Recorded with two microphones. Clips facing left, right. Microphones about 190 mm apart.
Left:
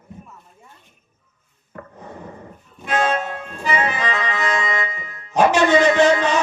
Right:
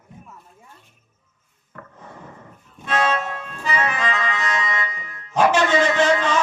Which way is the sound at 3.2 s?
25° left (ahead or behind).